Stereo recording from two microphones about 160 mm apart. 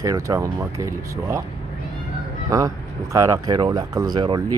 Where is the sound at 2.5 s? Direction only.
20° right (ahead or behind).